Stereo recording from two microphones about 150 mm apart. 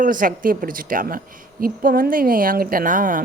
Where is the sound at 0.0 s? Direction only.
65° right (ahead or behind).